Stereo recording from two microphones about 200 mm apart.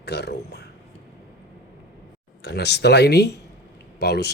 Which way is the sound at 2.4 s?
55° left (ahead or behind).